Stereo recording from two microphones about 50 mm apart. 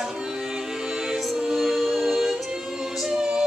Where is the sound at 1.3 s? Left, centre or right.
Centre.